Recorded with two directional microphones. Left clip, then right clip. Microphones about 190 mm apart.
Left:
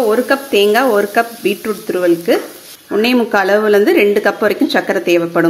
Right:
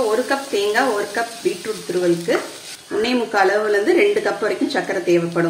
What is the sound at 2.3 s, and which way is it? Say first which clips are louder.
A woman's voice: left 6 dB; 55° left (ahead or behind).